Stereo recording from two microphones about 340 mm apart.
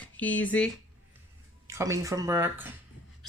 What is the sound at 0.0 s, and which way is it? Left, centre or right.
Speech, centre.